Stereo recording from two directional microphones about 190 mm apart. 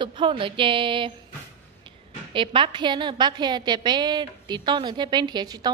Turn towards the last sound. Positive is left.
turn(degrees=-20)  # may be behind; listen again after turning